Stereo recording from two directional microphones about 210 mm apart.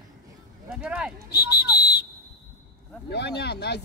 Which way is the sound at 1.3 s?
50° left (ahead or behind).